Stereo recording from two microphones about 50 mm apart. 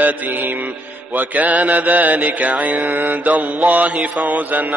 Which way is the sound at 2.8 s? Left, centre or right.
Right.